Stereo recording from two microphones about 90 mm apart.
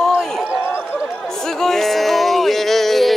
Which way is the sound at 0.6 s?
25° left (ahead or behind).